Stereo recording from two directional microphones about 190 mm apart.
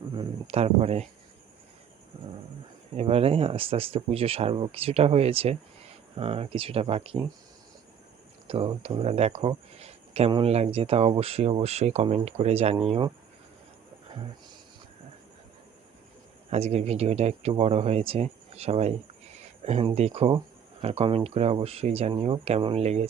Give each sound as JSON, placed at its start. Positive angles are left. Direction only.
{"t": 0.1, "sound": "speech", "side_deg": -30}
{"t": 2.2, "sound": "dog", "side_deg": -30}
{"t": 2.9, "sound": "speech", "side_deg": -30}
{"t": 8.4, "sound": "speech", "side_deg": -30}
{"t": 16.5, "sound": "speech", "side_deg": -35}